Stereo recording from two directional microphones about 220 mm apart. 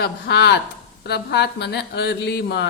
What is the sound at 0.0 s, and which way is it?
Mantra, 50° left (ahead or behind).